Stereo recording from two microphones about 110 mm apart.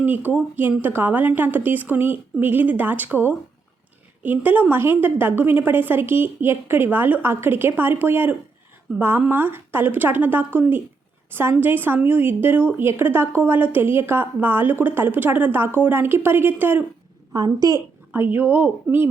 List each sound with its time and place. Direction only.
0.0 s a woman's voice: 15° right (ahead or behind)
17.3 s a woman's voice: 35° right (ahead or behind)
18.1 s speech: 20° right (ahead or behind)